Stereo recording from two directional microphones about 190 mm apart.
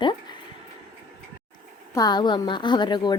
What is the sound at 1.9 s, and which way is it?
A woman's voice, 20° left (ahead or behind).